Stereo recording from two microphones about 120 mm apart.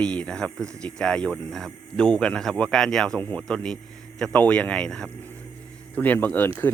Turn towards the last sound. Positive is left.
turn(degrees=15)  # may be behind; listen again after turning